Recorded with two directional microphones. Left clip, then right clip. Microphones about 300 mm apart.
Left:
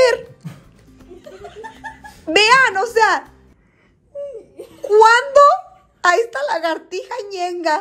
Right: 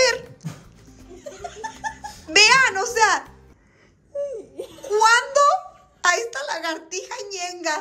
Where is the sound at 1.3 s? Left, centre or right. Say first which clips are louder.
Right 1 dB; right.